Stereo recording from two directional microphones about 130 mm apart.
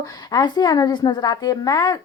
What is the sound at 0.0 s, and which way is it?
Speech, 30° left (ahead or behind).